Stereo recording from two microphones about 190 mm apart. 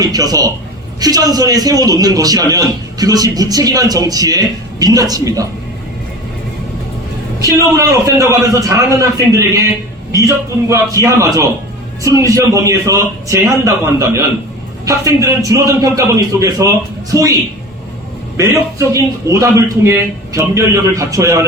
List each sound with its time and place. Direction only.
0.0 s a man's voice: 20° right (ahead or behind)
7.8 s a man's voice: 15° right (ahead or behind)
18.3 s a man's voice: 15° right (ahead or behind)